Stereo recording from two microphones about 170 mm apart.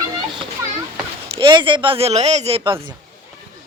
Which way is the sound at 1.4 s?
30° right (ahead or behind).